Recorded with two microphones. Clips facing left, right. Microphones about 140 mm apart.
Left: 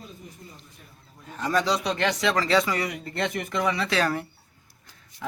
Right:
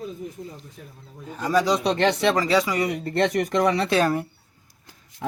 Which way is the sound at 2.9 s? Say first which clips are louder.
Right 7 dB; 35° right (ahead or behind).